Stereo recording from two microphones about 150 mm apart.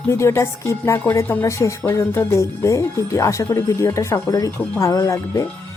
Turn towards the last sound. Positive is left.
turn(degrees=20)  # may be behind; listen again after turning